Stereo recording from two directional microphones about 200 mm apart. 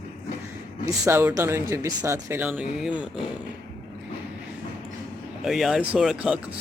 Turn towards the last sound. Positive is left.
turn(degrees=-5)  # may be behind; listen again after turning